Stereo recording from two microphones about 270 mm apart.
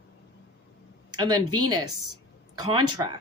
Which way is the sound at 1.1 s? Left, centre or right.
Centre.